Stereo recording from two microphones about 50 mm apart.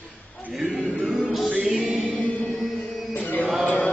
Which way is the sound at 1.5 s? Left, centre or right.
Right.